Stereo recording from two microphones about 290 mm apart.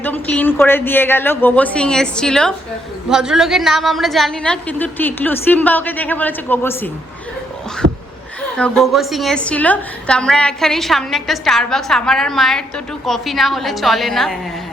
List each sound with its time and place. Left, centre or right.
0.0 s a woman's voice: centre
7.8 s a sound: right
8.5 s a woman's voice: centre